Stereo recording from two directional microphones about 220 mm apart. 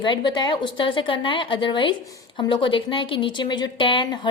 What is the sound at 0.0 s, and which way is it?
A woman's voice, 20° left (ahead or behind).